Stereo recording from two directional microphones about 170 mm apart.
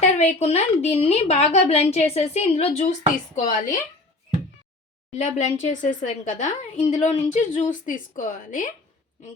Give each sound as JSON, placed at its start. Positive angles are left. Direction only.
{"t": 0.0, "sound": "a woman's voice", "side_deg": 40}
{"t": 5.1, "sound": "a woman's voice", "side_deg": 40}